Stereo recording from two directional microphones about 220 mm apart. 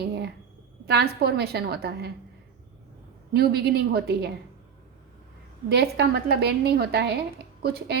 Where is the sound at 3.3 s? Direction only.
45° right (ahead or behind).